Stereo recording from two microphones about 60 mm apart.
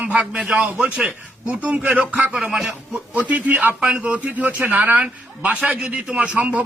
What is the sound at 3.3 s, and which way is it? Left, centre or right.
A man's voice, right.